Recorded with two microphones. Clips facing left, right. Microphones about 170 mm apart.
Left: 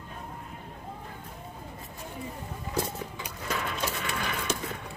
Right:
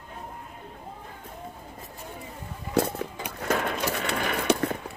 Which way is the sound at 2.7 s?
60° right (ahead or behind).